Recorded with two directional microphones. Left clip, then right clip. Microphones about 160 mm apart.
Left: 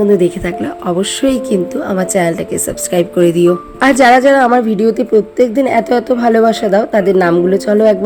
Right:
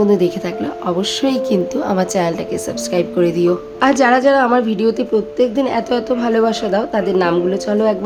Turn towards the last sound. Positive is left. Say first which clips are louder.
# left 6 dB
turn(degrees=25)  # may be behind; listen again after turning